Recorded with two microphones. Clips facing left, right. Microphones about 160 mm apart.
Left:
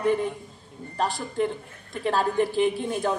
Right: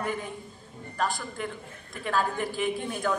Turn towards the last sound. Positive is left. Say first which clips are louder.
# left 3 dB
turn(degrees=30)  # may be behind; listen again after turning